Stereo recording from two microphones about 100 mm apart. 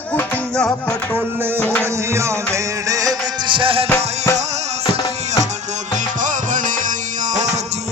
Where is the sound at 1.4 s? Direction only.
20° right (ahead or behind).